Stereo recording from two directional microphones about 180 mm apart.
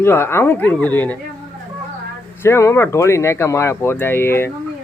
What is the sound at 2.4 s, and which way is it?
Speech, 15° left (ahead or behind).